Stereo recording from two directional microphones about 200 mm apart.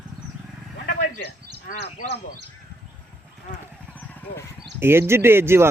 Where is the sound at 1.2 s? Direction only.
45° left (ahead or behind).